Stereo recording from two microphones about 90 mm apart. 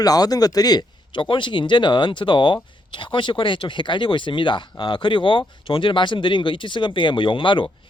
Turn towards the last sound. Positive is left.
turn(degrees=65)  # may be behind; listen again after turning